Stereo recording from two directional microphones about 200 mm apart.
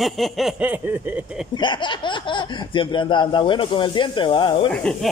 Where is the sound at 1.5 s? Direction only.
25° left (ahead or behind).